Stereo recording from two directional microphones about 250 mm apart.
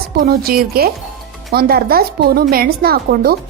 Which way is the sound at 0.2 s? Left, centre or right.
Right.